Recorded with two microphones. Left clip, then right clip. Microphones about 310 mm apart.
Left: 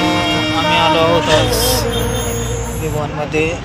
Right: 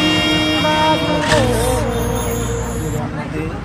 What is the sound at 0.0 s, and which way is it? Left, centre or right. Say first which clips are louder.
Music: even; centre.